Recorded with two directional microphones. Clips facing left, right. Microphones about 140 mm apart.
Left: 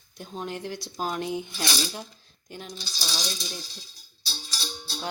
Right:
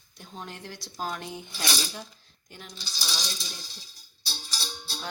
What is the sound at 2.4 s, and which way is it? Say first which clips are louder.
Speech: left 6 dB; 20° left (ahead or behind).